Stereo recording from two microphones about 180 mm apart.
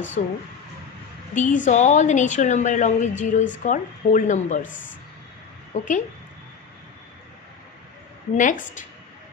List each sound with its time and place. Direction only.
0.2 s a woman's voice: 45° left (ahead or behind)
8.4 s a woman's voice: 45° left (ahead or behind)